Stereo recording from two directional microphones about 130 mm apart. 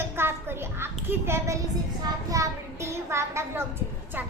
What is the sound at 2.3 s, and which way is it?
A child's voice, 25° right (ahead or behind).